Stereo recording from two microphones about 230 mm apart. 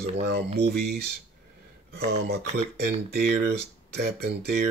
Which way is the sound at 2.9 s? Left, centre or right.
Right.